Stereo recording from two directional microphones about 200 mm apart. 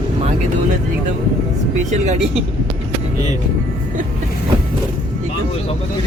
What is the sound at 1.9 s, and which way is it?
Speech, 35° right (ahead or behind).